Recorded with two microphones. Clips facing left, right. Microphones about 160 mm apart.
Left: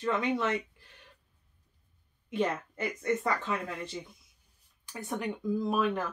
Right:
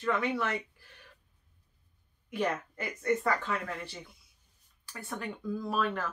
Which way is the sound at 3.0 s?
20° left (ahead or behind).